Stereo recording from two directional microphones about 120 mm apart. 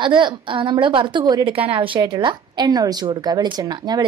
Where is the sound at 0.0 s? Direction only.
40° right (ahead or behind).